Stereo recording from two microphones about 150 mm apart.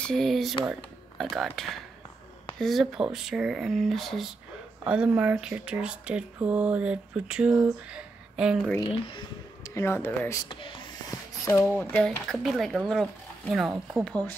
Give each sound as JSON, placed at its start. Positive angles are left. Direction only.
{"t": 0.0, "sound": "speech", "side_deg": 5}
{"t": 9.8, "sound": "speech", "side_deg": 15}
{"t": 10.4, "sound": "a sound", "side_deg": 30}
{"t": 11.7, "sound": "speech", "side_deg": 10}